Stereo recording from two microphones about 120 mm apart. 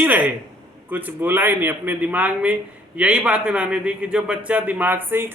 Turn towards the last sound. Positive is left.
turn(degrees=-15)  # may be behind; listen again after turning